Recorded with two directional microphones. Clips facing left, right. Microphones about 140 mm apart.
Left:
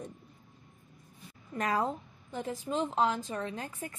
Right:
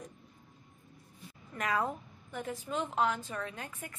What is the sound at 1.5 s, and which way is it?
A woman's voice, 30° left (ahead or behind).